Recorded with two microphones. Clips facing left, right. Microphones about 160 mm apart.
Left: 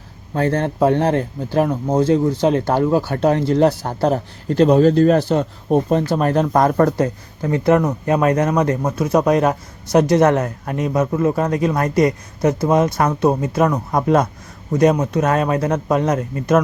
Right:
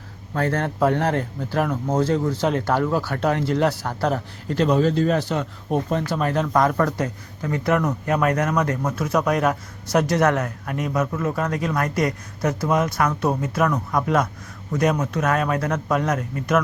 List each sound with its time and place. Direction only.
0.3 s speech: 20° left (ahead or behind)
4.9 s speech: 45° left (ahead or behind); by 16.6 s 30° left (ahead or behind)